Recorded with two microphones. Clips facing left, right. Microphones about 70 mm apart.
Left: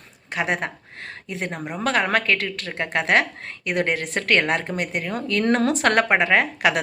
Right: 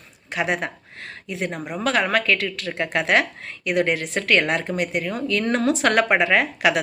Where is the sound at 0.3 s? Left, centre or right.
Left.